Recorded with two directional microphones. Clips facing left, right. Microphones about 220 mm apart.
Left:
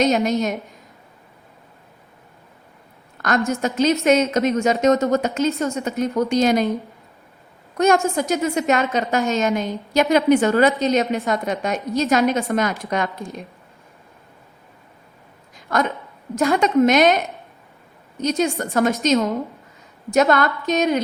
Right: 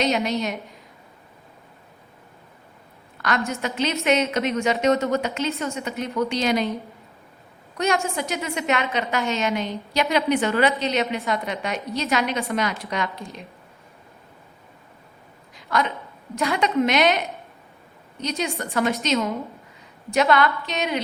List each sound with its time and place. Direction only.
0.0 s a woman's voice: 45° left (ahead or behind)
3.2 s a woman's voice: 45° left (ahead or behind)
7.8 s a woman's voice: 45° left (ahead or behind)
15.5 s a sound: 50° left (ahead or behind)
16.3 s a woman's voice: 45° left (ahead or behind)